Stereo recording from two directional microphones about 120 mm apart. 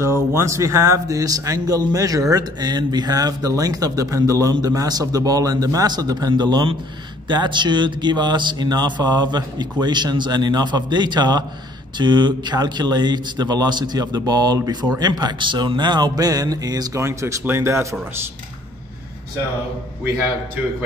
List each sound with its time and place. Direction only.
0.0 s speech: 20° right (ahead or behind)